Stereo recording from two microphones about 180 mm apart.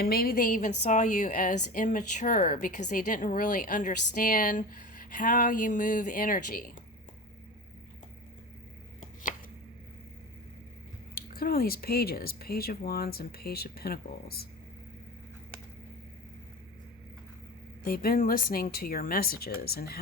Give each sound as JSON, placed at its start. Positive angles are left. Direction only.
{"t": 0.0, "sound": "a woman's voice", "side_deg": 55}
{"t": 11.1, "sound": "speech", "side_deg": 55}
{"t": 17.8, "sound": "speech", "side_deg": 55}